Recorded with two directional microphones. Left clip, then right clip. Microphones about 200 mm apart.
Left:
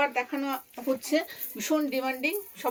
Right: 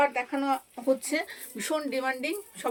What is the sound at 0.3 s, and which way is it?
A woman's voice, 25° right (ahead or behind).